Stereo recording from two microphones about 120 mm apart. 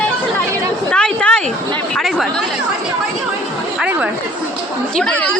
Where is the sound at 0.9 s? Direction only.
5° left (ahead or behind).